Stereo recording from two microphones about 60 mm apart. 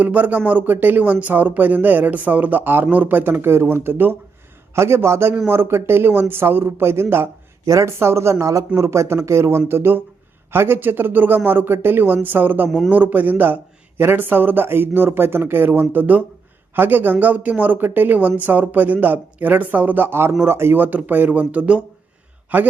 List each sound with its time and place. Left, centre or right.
0.0 s a man's voice: right
7.6 s a man's voice: right